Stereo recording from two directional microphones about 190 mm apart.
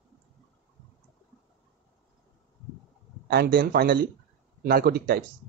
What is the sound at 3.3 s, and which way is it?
A man's voice, 55° right (ahead or behind).